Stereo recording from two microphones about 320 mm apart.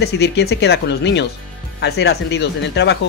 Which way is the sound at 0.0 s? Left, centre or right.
Left.